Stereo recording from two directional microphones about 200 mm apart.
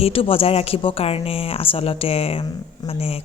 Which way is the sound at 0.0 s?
25° left (ahead or behind).